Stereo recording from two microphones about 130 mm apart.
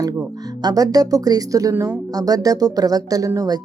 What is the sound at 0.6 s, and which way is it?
Speech, 30° right (ahead or behind).